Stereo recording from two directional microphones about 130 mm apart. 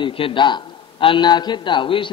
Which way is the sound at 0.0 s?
40° left (ahead or behind).